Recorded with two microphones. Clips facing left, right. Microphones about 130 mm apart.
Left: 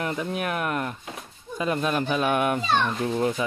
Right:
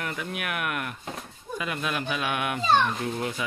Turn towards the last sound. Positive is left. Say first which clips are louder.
# left 6 dB
turn(degrees=25)  # may be behind; listen again after turning